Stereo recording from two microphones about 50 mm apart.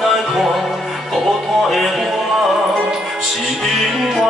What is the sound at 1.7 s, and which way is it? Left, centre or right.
Music, centre.